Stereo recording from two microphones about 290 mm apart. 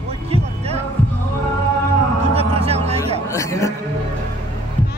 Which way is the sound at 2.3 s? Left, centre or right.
Right.